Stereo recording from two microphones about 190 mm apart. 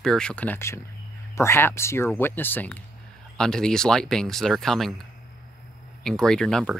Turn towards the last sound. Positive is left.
turn(degrees=0)  # may be behind; listen again after turning